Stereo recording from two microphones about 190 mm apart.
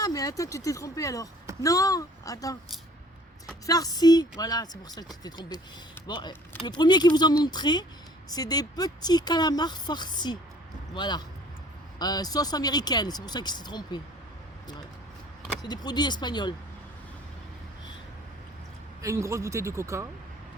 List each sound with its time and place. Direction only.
0.0 s speech: 20° left (ahead or behind)
3.7 s speech: 20° left (ahead or behind)
15.6 s speech: 20° left (ahead or behind)
19.0 s speech: 15° right (ahead or behind)